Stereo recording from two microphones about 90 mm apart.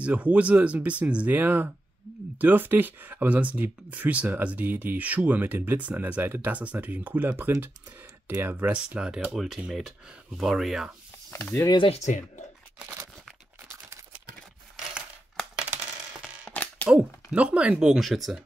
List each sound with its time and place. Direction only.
0.0 s speech: 15° right (ahead or behind)
8.7 s speech: 10° right (ahead or behind)
11.2 s speech: 25° left (ahead or behind)
16.5 s a sound: 15° left (ahead or behind)
16.9 s speech: 15° right (ahead or behind)